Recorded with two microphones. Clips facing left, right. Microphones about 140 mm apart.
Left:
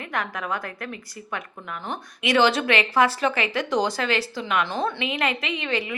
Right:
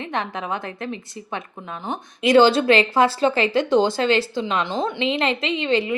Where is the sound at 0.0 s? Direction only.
25° right (ahead or behind).